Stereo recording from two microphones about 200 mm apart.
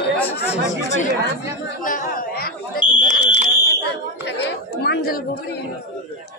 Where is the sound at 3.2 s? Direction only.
55° left (ahead or behind).